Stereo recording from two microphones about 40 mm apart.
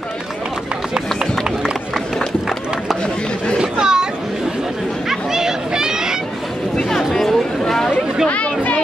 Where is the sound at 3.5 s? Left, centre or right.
Centre.